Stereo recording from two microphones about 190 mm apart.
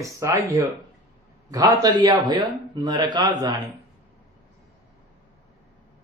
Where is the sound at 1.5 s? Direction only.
20° right (ahead or behind).